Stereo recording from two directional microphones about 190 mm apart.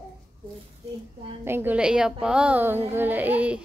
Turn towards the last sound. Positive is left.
turn(degrees=-5)  # may be behind; listen again after turning